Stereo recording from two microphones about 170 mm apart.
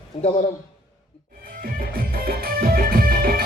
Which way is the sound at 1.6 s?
60° right (ahead or behind).